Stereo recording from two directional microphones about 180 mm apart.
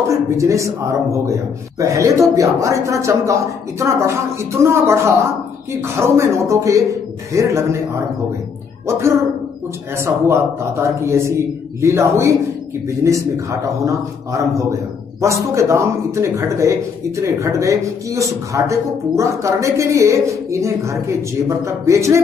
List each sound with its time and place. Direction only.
0.1 s speech: 15° right (ahead or behind)